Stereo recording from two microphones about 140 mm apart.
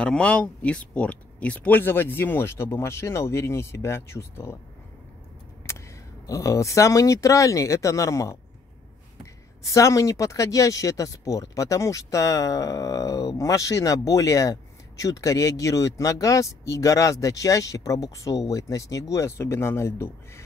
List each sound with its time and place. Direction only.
0.0 s speech: 5° left (ahead or behind)
6.2 s speech: 25° left (ahead or behind)